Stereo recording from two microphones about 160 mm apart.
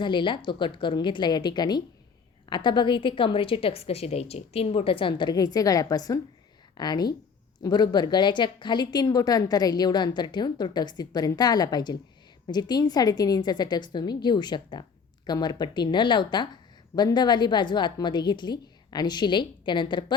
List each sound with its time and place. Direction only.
0.0 s a woman's voice: 30° left (ahead or behind)